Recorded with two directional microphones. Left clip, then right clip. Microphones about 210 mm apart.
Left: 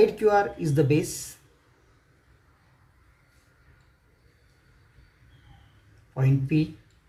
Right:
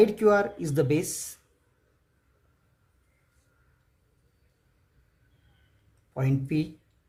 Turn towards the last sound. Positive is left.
turn(degrees=-50)  # may be behind; listen again after turning